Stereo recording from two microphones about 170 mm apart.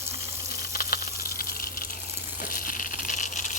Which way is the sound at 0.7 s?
60° left (ahead or behind).